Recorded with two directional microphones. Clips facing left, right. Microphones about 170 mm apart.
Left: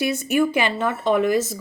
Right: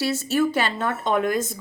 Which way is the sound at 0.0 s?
15° left (ahead or behind).